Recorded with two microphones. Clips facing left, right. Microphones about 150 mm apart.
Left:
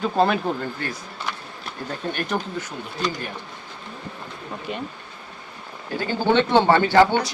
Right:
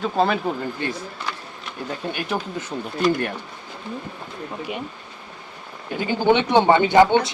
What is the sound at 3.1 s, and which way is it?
Speech, 65° right (ahead or behind).